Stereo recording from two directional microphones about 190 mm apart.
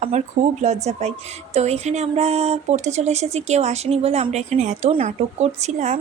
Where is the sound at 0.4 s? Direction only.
40° right (ahead or behind).